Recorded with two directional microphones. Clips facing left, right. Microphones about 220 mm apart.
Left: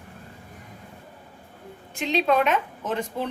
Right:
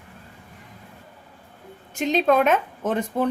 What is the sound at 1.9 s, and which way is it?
A woman's voice, 45° right (ahead or behind).